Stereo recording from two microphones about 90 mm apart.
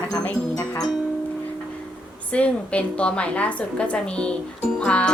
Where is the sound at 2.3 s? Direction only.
15° left (ahead or behind).